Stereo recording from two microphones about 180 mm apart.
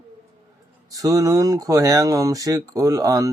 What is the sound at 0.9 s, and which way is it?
Speech, 20° right (ahead or behind).